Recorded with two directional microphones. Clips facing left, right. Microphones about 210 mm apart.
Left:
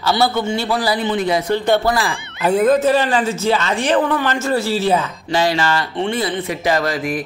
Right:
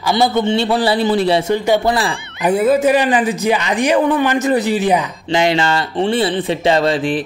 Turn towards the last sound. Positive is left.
turn(degrees=-25)  # may be behind; listen again after turning